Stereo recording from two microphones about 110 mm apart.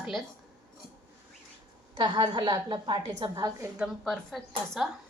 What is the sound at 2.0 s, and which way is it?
A woman's voice, 40° right (ahead or behind).